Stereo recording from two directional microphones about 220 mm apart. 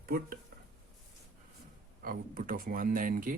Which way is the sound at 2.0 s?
40° right (ahead or behind).